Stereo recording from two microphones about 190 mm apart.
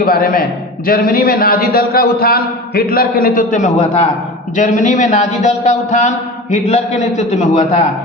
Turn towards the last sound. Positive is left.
turn(degrees=40)  # may be behind; listen again after turning